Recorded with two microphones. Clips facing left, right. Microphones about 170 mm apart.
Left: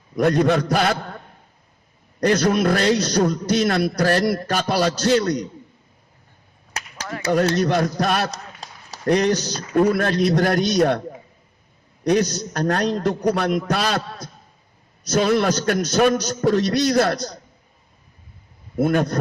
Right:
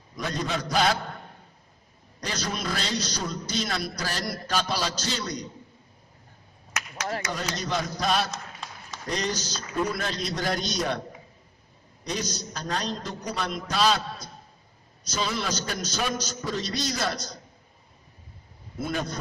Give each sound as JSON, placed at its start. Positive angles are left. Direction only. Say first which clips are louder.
{"t": 0.2, "sound": "a man's voice", "louder": "left 13 dB", "side_deg": 60}
{"t": 2.2, "sound": "a man's voice", "louder": "left 14 dB", "side_deg": 60}
{"t": 6.8, "sound": "whip", "louder": "left 1 dB", "side_deg": 30}
{"t": 7.5, "sound": "a man's voice", "louder": "left 10 dB", "side_deg": 60}
{"t": 8.3, "sound": "a sound", "louder": "left 2 dB", "side_deg": 35}
{"t": 9.0, "sound": "a man's voice", "louder": "left 12 dB", "side_deg": 60}
{"t": 12.0, "sound": "a man's voice", "louder": "left 13 dB", "side_deg": 65}
{"t": 18.8, "sound": "a man's voice", "louder": "left 11 dB", "side_deg": 60}